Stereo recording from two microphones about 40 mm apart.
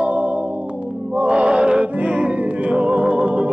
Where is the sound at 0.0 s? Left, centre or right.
Right.